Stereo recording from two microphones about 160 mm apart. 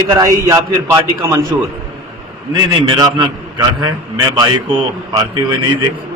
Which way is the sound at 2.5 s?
30° right (ahead or behind).